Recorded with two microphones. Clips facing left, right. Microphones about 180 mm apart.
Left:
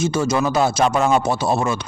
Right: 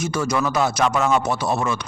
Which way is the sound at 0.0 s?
25° left (ahead or behind).